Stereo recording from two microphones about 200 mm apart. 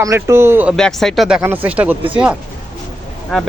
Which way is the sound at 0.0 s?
15° right (ahead or behind).